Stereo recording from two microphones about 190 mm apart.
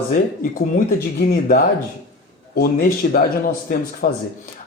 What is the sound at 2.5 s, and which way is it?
Speech, 50° left (ahead or behind).